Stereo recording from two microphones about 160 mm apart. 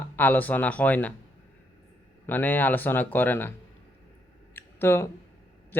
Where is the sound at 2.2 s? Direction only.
10° left (ahead or behind).